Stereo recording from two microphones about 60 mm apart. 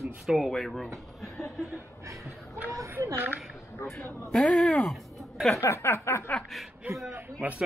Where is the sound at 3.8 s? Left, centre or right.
Left.